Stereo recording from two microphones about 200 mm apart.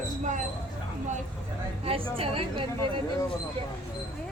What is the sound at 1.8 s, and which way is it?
Speech, 25° right (ahead or behind).